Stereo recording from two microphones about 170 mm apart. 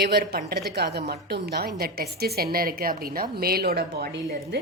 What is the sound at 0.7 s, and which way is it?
A woman's voice, 75° right (ahead or behind).